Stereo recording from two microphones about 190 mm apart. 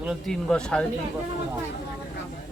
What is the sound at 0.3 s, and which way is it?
Speech, 5° left (ahead or behind).